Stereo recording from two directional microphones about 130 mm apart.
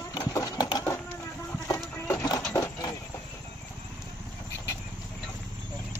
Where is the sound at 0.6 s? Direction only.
30° left (ahead or behind).